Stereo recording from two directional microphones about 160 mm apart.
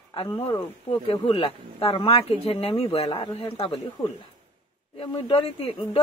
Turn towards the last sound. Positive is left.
turn(degrees=35)  # may be behind; listen again after turning